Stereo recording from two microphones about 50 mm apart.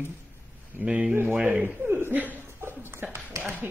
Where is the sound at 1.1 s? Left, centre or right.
Right.